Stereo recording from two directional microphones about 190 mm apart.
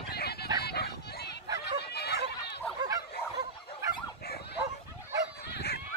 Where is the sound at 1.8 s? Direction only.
60° left (ahead or behind).